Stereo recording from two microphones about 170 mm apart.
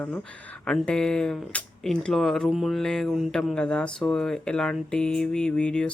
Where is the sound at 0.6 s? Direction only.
5° left (ahead or behind).